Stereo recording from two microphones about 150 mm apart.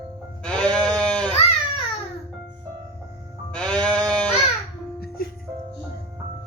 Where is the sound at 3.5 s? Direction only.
5° left (ahead or behind).